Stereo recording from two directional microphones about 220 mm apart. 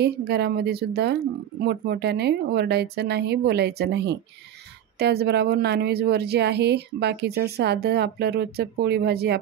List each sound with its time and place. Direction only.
0.0 s speech: 50° right (ahead or behind)